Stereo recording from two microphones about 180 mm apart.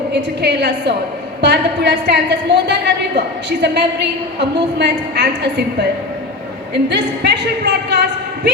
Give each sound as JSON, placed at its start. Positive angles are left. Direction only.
{"t": 0.1, "sound": "a woman's voice", "side_deg": -70}
{"t": 6.7, "sound": "a woman's voice", "side_deg": -70}